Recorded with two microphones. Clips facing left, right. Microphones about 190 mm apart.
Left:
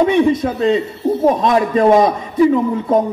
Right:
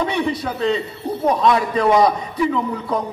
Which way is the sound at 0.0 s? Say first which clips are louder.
Left 8 dB; 45° left (ahead or behind).